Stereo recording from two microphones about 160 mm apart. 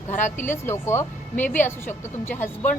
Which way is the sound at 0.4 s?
15° left (ahead or behind).